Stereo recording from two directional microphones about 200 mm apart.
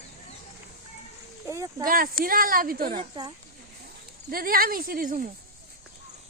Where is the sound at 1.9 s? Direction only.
45° right (ahead or behind).